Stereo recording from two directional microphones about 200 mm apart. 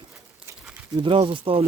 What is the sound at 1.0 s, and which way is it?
Speech, 25° right (ahead or behind).